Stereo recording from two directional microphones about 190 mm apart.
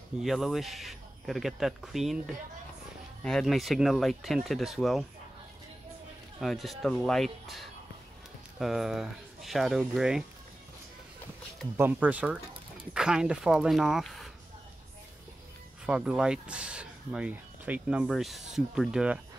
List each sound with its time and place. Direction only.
0.2 s speech: centre (ahead or behind)
6.4 s speech: centre (ahead or behind)
11.7 s speech: 10° right (ahead or behind)
15.8 s speech: 5° right (ahead or behind)